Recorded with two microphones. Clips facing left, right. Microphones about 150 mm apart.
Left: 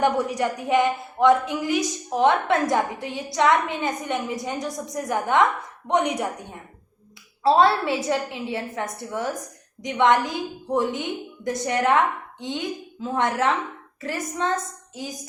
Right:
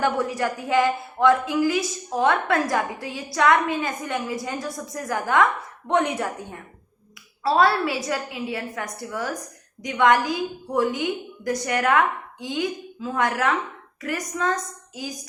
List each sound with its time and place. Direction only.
0.0 s a woman's voice: 20° left (ahead or behind)